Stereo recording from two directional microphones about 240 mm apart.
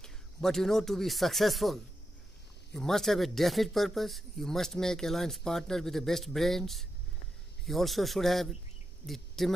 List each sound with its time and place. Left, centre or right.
0.0 s speech: centre